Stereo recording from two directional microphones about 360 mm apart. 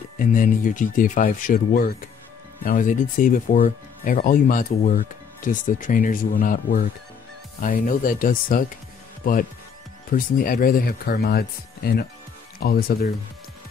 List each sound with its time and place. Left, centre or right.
0.2 s speech: left